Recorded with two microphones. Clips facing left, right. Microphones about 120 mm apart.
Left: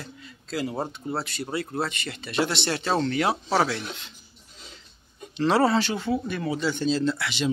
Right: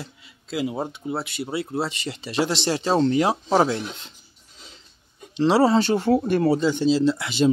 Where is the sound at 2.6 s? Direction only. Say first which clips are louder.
Right 4 dB; 15° right (ahead or behind).